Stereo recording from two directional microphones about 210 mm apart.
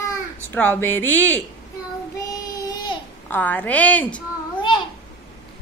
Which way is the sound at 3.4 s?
5° left (ahead or behind).